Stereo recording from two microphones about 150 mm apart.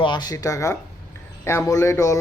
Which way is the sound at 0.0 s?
30° left (ahead or behind).